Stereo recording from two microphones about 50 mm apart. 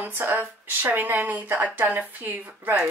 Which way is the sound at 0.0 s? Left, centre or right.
Right.